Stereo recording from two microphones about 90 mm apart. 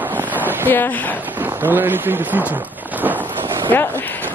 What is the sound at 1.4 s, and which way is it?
Speech, 20° right (ahead or behind).